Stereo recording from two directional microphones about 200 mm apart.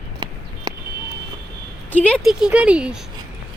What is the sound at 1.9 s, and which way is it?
Speech, 5° left (ahead or behind).